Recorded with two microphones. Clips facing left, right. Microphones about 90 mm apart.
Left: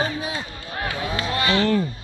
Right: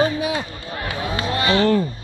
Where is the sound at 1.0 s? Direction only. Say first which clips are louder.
Right 3 dB; 10° right (ahead or behind).